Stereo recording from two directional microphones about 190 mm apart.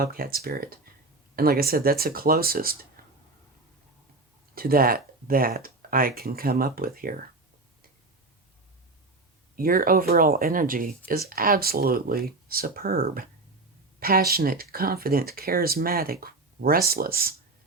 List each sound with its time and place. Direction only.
0.0 s speech: 50° right (ahead or behind)
4.5 s speech: 50° right (ahead or behind)
9.6 s speech: 50° right (ahead or behind)